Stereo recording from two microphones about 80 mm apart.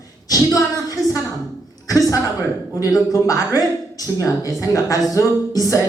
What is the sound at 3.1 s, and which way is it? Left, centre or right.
Speech, left.